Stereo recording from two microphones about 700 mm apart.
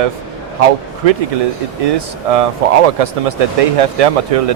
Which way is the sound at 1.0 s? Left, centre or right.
Right.